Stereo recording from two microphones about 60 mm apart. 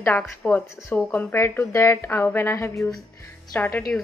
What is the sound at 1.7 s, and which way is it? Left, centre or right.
Speech, left.